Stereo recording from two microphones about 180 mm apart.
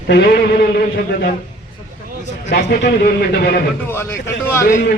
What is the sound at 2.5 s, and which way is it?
Speech, 75° left (ahead or behind).